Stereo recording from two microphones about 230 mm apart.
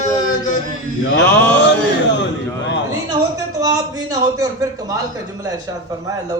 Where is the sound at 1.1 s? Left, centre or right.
Left.